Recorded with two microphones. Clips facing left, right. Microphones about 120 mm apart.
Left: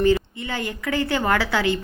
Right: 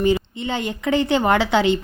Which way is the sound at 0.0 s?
20° right (ahead or behind).